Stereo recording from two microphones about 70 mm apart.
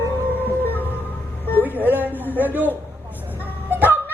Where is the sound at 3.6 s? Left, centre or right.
Right.